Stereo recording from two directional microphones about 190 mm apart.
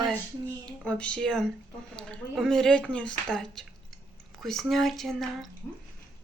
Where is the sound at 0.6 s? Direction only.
5° left (ahead or behind).